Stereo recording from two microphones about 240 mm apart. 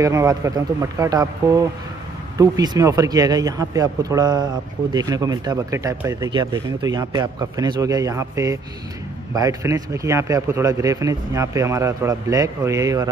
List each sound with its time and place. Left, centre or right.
0.0 s speech: centre